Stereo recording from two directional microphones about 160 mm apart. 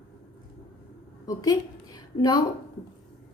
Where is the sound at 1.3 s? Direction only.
25° left (ahead or behind).